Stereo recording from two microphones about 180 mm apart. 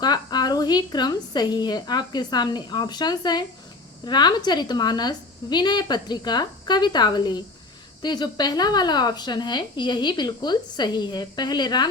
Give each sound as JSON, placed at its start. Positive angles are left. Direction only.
{"t": 0.0, "sound": "a woman's voice", "side_deg": 20}